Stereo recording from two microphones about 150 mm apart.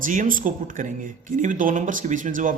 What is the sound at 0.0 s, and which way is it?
Speech, 65° right (ahead or behind).